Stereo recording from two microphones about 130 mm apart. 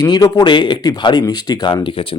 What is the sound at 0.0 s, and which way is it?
Speech, 30° left (ahead or behind).